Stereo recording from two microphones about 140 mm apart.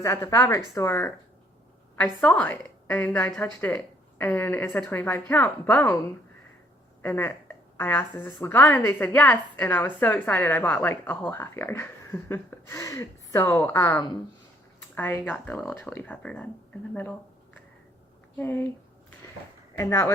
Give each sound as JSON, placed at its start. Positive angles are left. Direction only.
{"t": 0.0, "sound": "a woman's voice", "side_deg": 20}
{"t": 2.2, "sound": "a woman's voice", "side_deg": 10}
{"t": 7.0, "sound": "a woman's voice", "side_deg": 15}
{"t": 18.3, "sound": "a woman's voice", "side_deg": 15}
{"t": 19.7, "sound": "speech", "side_deg": 20}